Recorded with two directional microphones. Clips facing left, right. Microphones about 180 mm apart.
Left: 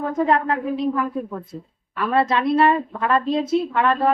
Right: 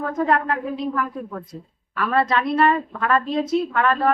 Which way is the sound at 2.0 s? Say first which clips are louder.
Left 1 dB; 25° left (ahead or behind).